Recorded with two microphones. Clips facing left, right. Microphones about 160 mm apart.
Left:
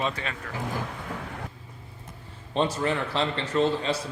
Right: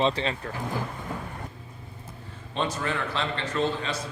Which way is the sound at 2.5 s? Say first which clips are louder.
Left 3 dB; 25° left (ahead or behind).